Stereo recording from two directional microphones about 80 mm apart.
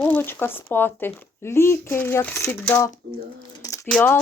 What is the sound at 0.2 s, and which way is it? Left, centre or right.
A woman's voice, left.